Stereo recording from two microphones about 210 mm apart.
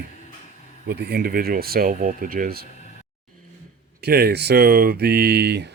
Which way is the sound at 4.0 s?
50° right (ahead or behind).